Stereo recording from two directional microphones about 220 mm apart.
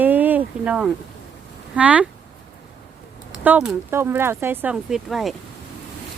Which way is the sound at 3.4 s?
5° right (ahead or behind).